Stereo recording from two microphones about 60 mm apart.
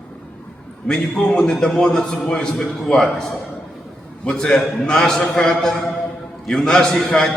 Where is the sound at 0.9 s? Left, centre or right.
Centre.